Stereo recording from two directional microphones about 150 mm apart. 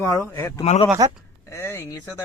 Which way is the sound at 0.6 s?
40° left (ahead or behind).